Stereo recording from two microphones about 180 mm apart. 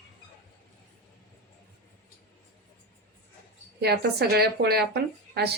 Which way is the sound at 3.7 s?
65° right (ahead or behind).